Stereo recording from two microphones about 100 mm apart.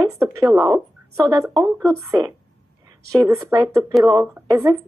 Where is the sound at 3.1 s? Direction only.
35° right (ahead or behind).